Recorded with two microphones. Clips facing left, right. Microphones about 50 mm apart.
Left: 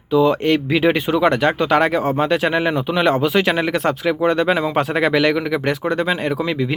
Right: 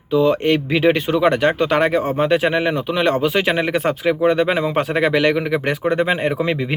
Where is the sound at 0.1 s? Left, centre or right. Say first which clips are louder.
Even; centre.